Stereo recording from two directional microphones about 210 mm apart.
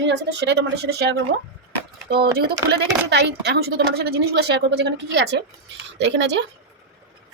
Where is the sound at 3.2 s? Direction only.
55° right (ahead or behind).